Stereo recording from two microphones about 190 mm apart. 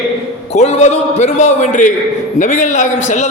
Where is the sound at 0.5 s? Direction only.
35° left (ahead or behind).